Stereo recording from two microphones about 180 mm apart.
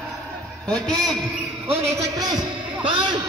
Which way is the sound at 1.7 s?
15° right (ahead or behind).